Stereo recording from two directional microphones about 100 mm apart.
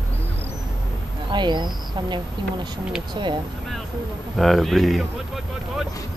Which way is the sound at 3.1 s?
50° right (ahead or behind).